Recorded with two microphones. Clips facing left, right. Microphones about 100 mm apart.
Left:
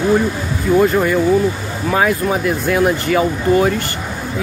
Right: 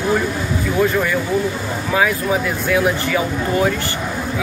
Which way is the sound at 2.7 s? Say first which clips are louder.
Left 2 dB; 40° left (ahead or behind).